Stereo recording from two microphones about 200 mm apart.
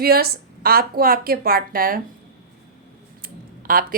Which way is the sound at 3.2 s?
45° right (ahead or behind).